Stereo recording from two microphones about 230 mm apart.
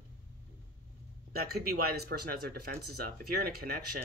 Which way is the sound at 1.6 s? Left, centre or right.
Right.